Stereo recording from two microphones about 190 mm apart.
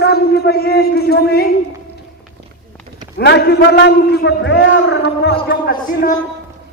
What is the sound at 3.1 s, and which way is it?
A man's voice, 65° left (ahead or behind).